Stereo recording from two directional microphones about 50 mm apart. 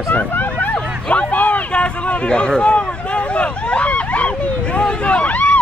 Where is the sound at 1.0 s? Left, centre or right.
Left.